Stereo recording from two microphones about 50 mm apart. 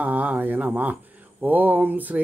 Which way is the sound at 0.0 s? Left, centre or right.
Right.